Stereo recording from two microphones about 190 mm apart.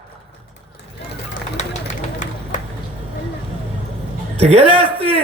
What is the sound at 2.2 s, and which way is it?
Run, 40° left (ahead or behind).